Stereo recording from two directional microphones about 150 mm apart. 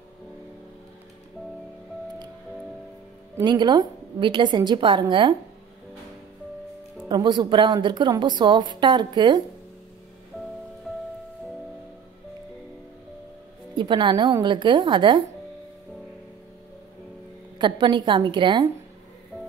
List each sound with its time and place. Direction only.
3.4 s a woman's voice: 30° right (ahead or behind)
7.1 s a woman's voice: 30° right (ahead or behind)
13.7 s a woman's voice: 30° right (ahead or behind)
17.6 s a woman's voice: 30° right (ahead or behind)